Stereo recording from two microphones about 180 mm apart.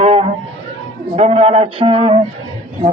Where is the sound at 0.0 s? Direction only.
35° right (ahead or behind).